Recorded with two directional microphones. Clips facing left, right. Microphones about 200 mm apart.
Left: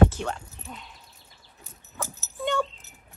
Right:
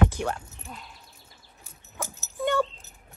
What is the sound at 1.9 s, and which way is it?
Dog, 15° right (ahead or behind).